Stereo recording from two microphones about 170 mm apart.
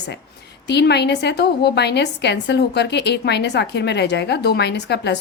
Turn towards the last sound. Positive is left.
turn(degrees=80)